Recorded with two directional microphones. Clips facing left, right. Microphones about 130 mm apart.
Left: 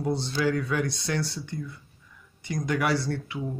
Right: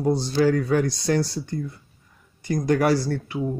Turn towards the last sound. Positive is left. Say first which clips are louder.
# right 5 dB
turn(degrees=-40)  # may be behind; listen again after turning